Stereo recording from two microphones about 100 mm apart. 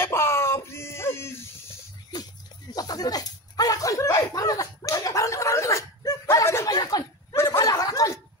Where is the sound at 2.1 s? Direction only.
45° left (ahead or behind).